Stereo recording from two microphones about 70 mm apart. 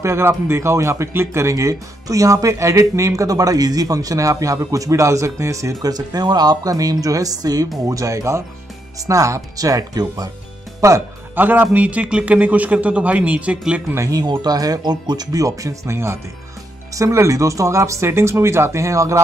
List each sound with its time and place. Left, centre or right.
0.0 s speech: right
7.9 s speech: right
10.8 s speech: right
11.3 s a man's voice: right
14.1 s speech: right